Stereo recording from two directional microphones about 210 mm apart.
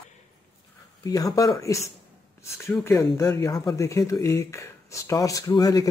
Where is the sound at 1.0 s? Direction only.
15° left (ahead or behind).